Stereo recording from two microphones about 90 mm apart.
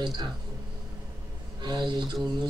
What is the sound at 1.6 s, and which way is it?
Speech, 55° right (ahead or behind).